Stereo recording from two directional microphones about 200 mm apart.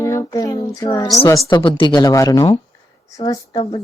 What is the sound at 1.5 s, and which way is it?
Speech, 25° left (ahead or behind).